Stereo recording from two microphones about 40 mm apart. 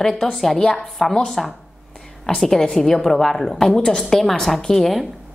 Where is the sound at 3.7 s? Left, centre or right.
Left.